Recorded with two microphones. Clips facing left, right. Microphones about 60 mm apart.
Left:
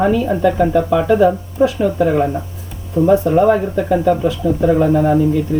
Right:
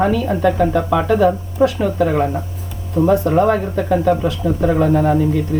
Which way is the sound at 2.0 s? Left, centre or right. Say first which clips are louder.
Left 1 dB; centre.